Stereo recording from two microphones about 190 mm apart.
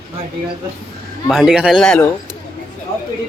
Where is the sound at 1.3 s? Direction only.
Centre (ahead or behind).